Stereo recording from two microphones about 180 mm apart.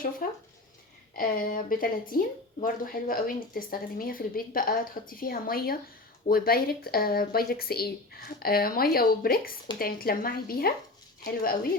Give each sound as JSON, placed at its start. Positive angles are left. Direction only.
{"t": 0.2, "sound": "speech", "side_deg": 50}